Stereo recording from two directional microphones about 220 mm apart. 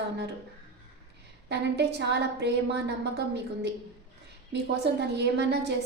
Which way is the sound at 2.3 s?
50° right (ahead or behind).